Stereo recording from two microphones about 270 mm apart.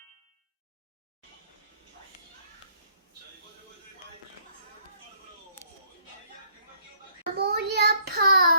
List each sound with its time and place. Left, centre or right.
7.3 s child singing: right